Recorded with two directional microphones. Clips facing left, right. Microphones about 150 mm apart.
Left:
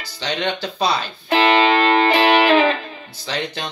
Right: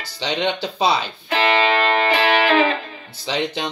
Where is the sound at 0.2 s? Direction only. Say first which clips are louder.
Right 1 dB; 20° right (ahead or behind).